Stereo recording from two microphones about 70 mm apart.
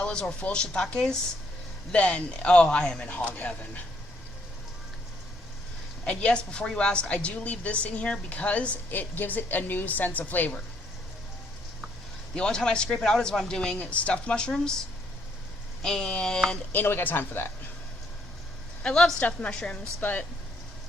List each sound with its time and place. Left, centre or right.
0.0 s a woman's voice: centre
6.1 s a woman's voice: centre
12.3 s speech: centre
16.7 s speech: left
18.8 s speech: centre
20.0 s a woman's voice: left